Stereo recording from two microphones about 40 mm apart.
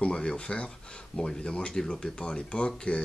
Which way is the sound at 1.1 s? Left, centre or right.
Centre.